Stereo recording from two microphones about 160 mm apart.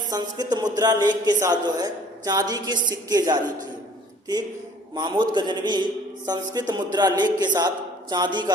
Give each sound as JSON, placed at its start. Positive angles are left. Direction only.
{"t": 0.1, "sound": "a man's voice", "side_deg": -25}
{"t": 4.9, "sound": "a man's voice", "side_deg": -30}